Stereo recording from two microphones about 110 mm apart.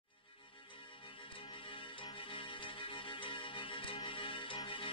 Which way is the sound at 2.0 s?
50° left (ahead or behind).